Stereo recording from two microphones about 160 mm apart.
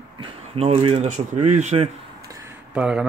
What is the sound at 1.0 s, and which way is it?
Speech, 50° right (ahead or behind).